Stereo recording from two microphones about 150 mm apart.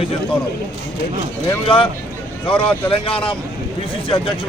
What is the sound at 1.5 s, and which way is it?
Speech, 35° left (ahead or behind).